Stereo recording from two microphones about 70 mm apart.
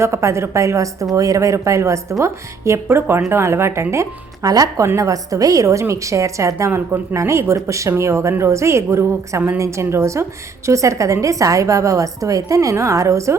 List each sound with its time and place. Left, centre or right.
0.0 s speech: right
2.8 s speech: right
4.4 s speech: right
6.7 s speech: right